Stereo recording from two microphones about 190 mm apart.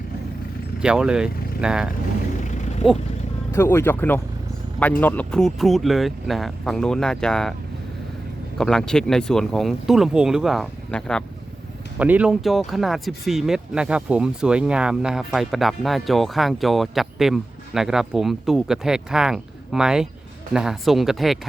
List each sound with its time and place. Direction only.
0.8 s speech: 5° right (ahead or behind)
2.4 s vehicle: 40° left (ahead or behind)
3.5 s speech: 15° left (ahead or behind)
8.5 s speech: centre (ahead or behind)
11.9 s speech: 5° right (ahead or behind)